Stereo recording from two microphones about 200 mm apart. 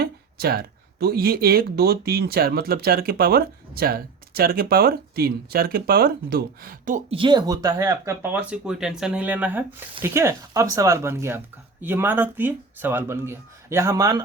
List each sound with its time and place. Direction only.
0.0 s speech: 50° right (ahead or behind)
7.1 s speech: 25° right (ahead or behind)